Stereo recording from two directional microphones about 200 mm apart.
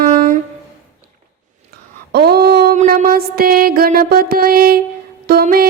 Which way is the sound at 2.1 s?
50° right (ahead or behind).